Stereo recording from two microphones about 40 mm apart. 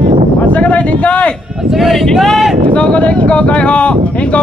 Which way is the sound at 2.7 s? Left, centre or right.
Left.